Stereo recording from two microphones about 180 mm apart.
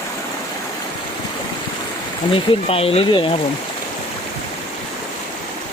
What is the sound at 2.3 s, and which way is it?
Speech, 30° left (ahead or behind).